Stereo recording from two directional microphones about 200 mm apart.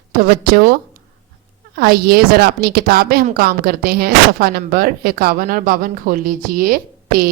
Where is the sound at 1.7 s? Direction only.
50° right (ahead or behind).